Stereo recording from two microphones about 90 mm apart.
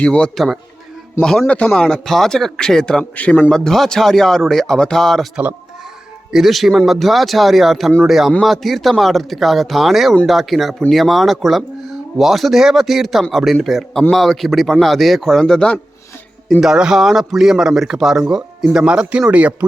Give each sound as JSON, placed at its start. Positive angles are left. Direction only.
{"t": 0.0, "sound": "a man's voice", "side_deg": 10}
{"t": 0.3, "sound": "a man's voice", "side_deg": 0}
{"t": 3.5, "sound": "speech", "side_deg": 5}
{"t": 6.3, "sound": "speech", "side_deg": 0}
{"t": 16.6, "sound": "speech", "side_deg": -5}